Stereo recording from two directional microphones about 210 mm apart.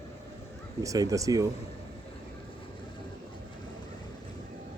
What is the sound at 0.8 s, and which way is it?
Speech, 15° right (ahead or behind).